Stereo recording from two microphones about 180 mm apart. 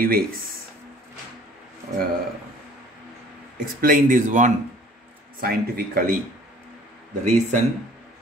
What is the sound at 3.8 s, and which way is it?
Speech, 50° right (ahead or behind).